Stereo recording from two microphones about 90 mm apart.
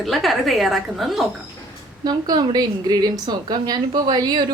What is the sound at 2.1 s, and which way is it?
Speech, 50° right (ahead or behind).